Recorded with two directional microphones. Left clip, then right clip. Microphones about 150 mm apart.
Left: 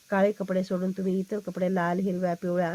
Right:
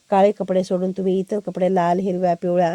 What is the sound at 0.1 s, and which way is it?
A woman's voice, 25° right (ahead or behind).